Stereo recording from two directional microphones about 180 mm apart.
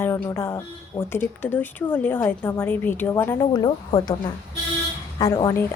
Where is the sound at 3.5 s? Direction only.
25° left (ahead or behind).